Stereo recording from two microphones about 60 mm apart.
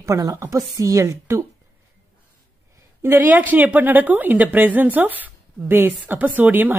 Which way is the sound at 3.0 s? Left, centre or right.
Right.